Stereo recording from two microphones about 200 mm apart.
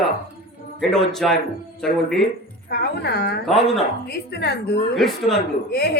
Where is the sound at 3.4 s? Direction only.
Centre (ahead or behind).